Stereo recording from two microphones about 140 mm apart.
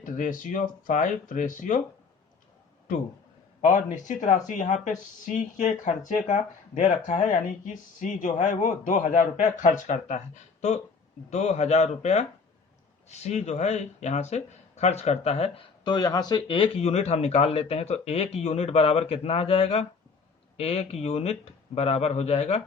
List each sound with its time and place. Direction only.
0.0 s speech: 70° left (ahead or behind)
3.6 s speech: 60° left (ahead or behind); by 15.6 s 45° left (ahead or behind)
15.8 s speech: 30° left (ahead or behind); by 22.6 s 50° left (ahead or behind)